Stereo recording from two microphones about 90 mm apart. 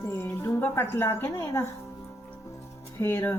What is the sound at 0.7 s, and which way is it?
Speech, 25° left (ahead or behind).